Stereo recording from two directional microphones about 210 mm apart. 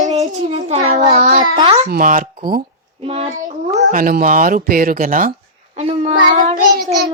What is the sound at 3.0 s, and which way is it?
A child's voice, 30° right (ahead or behind).